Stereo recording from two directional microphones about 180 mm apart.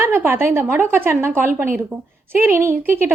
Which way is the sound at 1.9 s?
10° left (ahead or behind).